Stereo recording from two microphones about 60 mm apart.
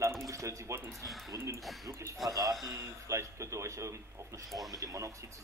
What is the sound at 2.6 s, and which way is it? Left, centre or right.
Speech, right.